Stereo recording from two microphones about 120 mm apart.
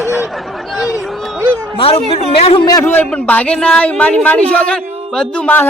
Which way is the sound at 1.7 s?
50° left (ahead or behind).